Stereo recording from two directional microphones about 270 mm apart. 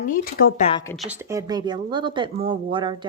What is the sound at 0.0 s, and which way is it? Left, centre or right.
Speech, left.